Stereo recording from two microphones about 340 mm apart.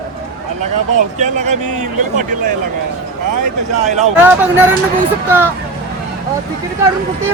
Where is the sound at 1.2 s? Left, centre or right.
Right.